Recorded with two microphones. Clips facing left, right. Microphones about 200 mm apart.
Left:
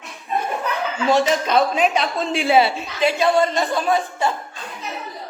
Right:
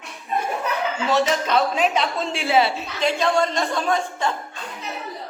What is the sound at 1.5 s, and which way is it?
Speech, 15° left (ahead or behind).